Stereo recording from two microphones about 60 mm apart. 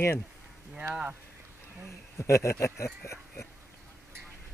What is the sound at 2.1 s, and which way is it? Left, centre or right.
Speech, left.